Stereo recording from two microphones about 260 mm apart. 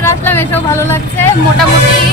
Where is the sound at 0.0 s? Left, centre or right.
Centre.